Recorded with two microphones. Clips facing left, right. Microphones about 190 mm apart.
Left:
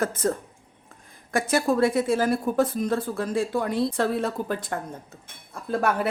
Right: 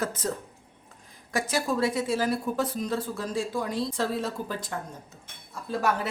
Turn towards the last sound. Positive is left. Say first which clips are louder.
# left 3 dB
turn(degrees=55)  # may be behind; listen again after turning